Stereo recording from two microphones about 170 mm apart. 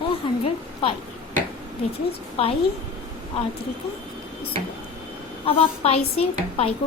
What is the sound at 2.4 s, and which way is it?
Speech, 35° left (ahead or behind).